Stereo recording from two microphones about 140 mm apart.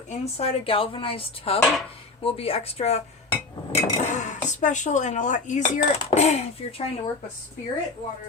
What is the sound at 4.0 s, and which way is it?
Speech, 60° left (ahead or behind).